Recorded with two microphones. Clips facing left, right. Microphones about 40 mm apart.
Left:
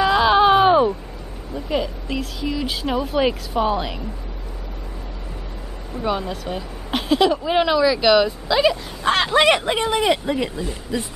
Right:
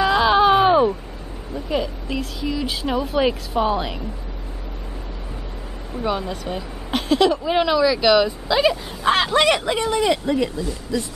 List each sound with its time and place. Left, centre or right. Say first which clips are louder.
0.0 s a sound: left 1 dB; centre
1.5 s a woman's voice: even; centre
5.9 s a woman's voice: even; centre
9.3 s speech: left 1 dB; centre